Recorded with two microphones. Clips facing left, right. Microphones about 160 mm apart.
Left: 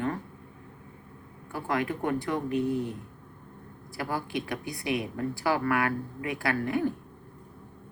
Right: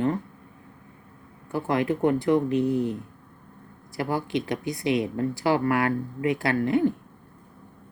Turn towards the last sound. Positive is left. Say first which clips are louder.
# right 5 dB
turn(degrees=-25)  # may be behind; listen again after turning